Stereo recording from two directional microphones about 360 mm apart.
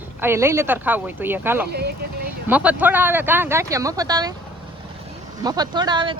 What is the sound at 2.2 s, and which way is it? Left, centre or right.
Speech, centre.